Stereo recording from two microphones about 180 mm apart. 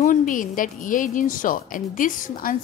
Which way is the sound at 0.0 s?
45° left (ahead or behind).